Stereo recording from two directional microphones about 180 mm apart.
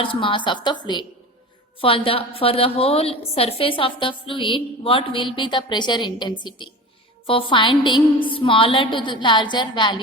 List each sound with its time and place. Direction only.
0.0 s a woman's voice: 30° left (ahead or behind)
1.8 s a woman's voice: 30° left (ahead or behind)